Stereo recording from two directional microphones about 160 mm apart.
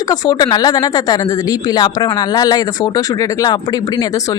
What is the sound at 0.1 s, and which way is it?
Speech, 25° left (ahead or behind).